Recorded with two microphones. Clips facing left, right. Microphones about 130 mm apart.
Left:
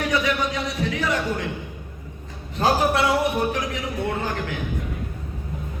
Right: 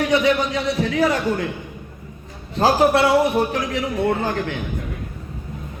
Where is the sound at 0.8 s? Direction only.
30° right (ahead or behind).